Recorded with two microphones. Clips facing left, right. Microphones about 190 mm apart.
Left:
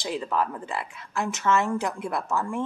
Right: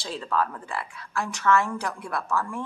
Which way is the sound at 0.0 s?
20° left (ahead or behind).